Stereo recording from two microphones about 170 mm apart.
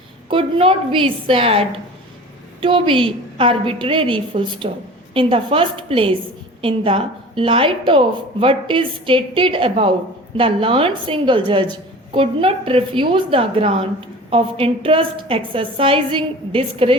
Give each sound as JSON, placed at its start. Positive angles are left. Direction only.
{"t": 0.3, "sound": "a woman's voice", "side_deg": -30}